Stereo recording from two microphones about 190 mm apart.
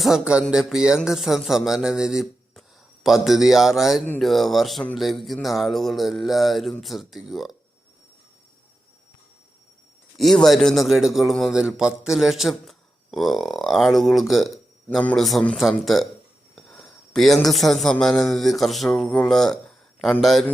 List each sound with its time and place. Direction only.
0.0 s a man's voice: 5° right (ahead or behind)
10.2 s a man's voice: centre (ahead or behind)